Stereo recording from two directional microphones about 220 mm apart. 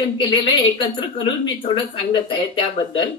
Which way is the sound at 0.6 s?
20° left (ahead or behind).